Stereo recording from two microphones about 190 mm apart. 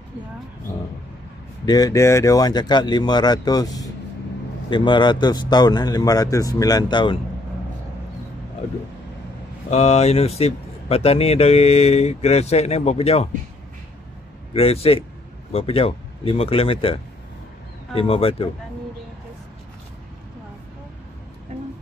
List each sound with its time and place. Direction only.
1.7 s a man's voice: 20° left (ahead or behind)
9.7 s speech: 35° left (ahead or behind)
14.5 s a man's voice: 30° left (ahead or behind)